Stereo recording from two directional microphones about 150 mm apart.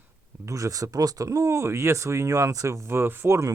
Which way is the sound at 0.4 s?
20° right (ahead or behind).